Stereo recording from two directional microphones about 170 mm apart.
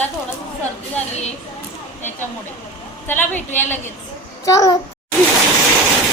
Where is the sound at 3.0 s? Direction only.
10° left (ahead or behind).